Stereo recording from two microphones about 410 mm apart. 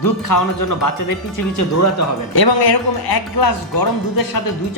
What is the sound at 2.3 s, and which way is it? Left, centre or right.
Speech, left.